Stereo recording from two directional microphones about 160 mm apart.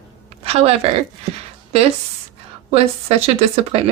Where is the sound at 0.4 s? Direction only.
40° right (ahead or behind).